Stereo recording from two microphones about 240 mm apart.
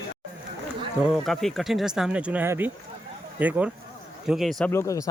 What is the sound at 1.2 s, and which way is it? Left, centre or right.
Speech, centre.